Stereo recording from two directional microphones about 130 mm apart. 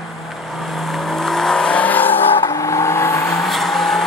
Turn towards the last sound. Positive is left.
turn(degrees=0)  # may be behind; listen again after turning